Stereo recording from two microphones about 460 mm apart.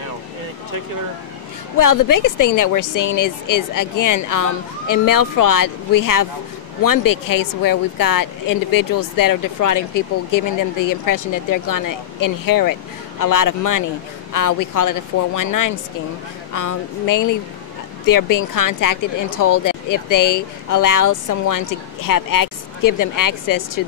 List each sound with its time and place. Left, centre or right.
1.8 s speech: left